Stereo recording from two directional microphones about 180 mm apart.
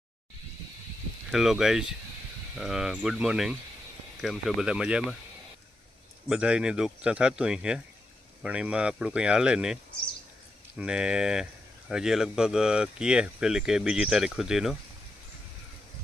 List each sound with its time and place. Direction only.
1.3 s speech: centre (ahead or behind)
6.2 s speech: 5° right (ahead or behind)
10.8 s speech: 5° right (ahead or behind)